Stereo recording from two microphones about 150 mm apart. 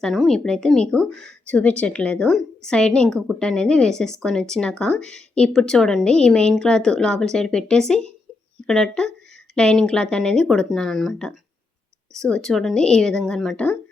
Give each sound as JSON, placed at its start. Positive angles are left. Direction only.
{"t": 0.0, "sound": "speech", "side_deg": 0}